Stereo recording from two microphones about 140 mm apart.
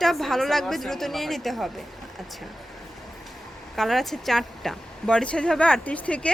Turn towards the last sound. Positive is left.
turn(degrees=10)  # may be behind; listen again after turning